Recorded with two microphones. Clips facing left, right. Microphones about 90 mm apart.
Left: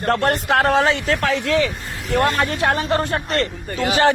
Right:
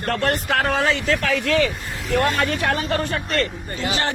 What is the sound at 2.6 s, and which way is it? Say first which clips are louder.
Speech: left 3 dB; 35° left (ahead or behind).